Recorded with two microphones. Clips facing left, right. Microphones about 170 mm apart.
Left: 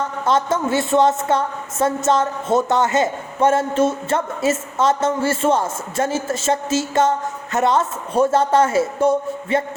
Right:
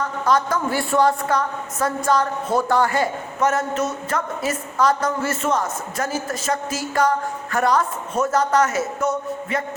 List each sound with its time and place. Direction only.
0.3 s a woman's voice: 25° left (ahead or behind)